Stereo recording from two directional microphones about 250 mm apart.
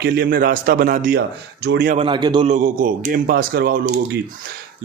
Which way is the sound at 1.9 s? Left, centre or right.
Centre.